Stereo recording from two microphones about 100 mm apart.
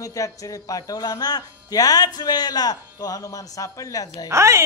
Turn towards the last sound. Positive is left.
turn(degrees=-30)  # may be behind; listen again after turning